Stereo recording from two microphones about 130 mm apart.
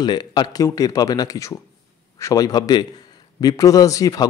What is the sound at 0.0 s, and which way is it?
Speech, 35° left (ahead or behind).